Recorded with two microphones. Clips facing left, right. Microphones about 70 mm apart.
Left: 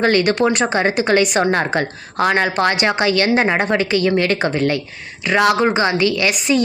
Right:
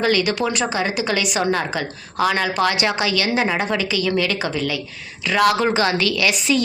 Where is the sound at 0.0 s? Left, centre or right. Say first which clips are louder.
Left 4 dB; left.